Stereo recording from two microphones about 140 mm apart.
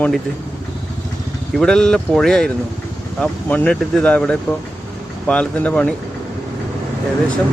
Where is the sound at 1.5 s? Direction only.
5° left (ahead or behind).